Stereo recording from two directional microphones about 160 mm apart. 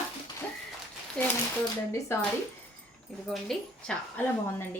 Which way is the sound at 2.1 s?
15° left (ahead or behind).